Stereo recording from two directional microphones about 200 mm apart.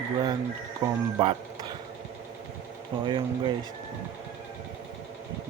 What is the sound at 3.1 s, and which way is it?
Speech, 25° right (ahead or behind).